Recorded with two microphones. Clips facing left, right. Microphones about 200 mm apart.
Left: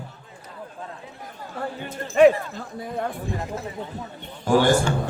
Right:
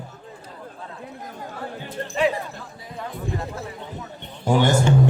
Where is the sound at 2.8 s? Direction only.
55° left (ahead or behind).